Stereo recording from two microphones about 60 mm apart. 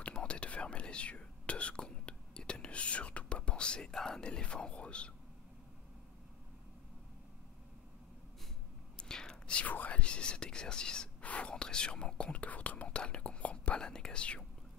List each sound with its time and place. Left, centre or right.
0.0 s whispering: centre
8.9 s whispering: centre